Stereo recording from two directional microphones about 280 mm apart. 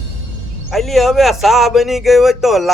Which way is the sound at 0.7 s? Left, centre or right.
Centre.